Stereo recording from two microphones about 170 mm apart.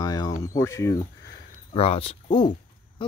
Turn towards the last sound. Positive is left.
turn(degrees=30)  # may be behind; listen again after turning